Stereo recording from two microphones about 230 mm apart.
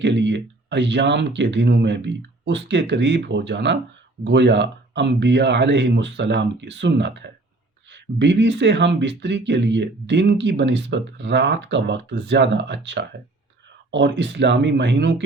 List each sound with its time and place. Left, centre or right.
0.0 s speech: right